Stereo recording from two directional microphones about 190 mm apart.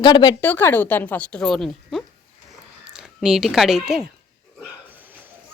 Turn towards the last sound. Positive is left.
turn(degrees=0)  # may be behind; listen again after turning